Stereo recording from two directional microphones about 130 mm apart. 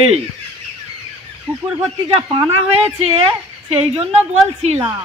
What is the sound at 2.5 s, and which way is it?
A woman's voice, 50° right (ahead or behind).